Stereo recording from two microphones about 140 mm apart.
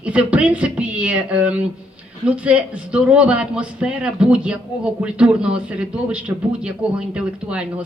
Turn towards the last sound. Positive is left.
turn(degrees=-10)  # may be behind; listen again after turning